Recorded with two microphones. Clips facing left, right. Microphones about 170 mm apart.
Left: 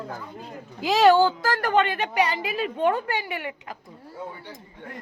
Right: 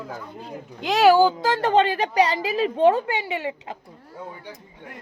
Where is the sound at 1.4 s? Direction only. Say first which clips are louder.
Right 3 dB; 20° right (ahead or behind).